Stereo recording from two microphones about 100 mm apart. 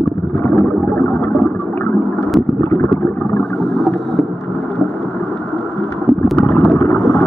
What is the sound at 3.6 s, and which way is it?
Boat, 5° left (ahead or behind).